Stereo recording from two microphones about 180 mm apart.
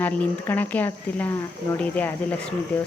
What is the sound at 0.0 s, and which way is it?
Speech, 10° left (ahead or behind).